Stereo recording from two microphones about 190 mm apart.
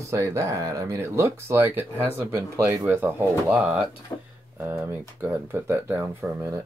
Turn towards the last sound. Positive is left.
turn(degrees=-15)  # may be behind; listen again after turning